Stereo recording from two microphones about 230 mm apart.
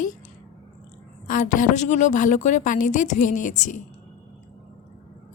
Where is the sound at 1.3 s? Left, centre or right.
Left.